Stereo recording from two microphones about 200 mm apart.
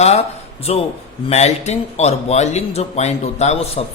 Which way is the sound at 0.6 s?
30° left (ahead or behind).